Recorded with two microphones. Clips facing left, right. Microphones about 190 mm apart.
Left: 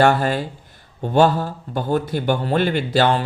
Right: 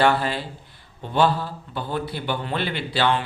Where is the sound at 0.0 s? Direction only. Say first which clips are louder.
Left 4 dB; 45° left (ahead or behind).